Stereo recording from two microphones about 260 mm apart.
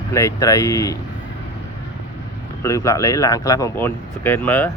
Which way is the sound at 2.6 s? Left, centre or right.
Centre.